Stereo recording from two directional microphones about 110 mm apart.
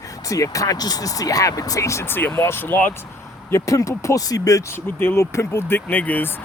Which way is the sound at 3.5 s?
30° left (ahead or behind).